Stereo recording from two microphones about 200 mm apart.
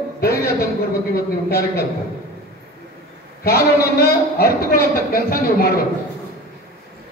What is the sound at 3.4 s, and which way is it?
A man's voice, 50° left (ahead or behind).